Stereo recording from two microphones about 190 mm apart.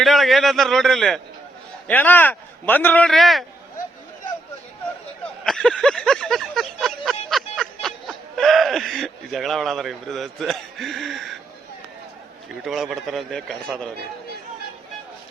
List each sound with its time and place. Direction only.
0.0 s a man's voice: centre (ahead or behind)
5.5 s a sound: 5° left (ahead or behind)
12.5 s a man's voice: centre (ahead or behind)